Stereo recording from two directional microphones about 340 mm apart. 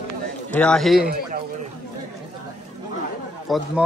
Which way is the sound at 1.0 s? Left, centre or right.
Right.